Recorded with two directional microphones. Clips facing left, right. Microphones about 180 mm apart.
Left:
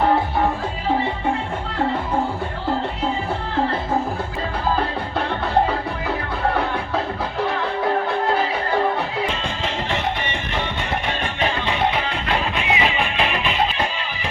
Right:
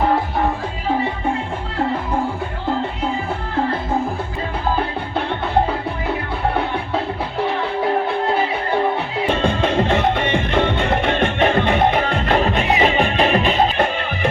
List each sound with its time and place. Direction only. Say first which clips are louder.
9.3 s music: right 8 dB; 60° right (ahead or behind)